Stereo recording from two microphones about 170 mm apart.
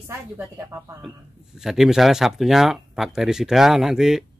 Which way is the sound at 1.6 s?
Centre (ahead or behind).